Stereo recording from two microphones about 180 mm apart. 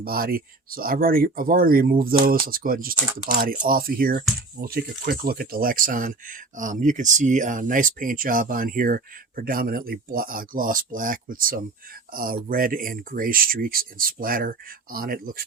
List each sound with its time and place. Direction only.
0.0 s speech: 55° right (ahead or behind)